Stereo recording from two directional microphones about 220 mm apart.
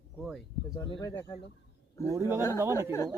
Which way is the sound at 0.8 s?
20° left (ahead or behind).